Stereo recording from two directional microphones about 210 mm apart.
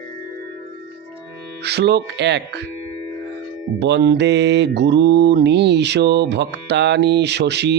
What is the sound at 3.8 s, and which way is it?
Mantra, 55° right (ahead or behind).